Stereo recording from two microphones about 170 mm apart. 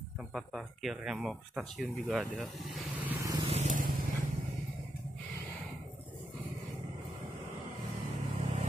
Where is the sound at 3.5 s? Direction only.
45° right (ahead or behind).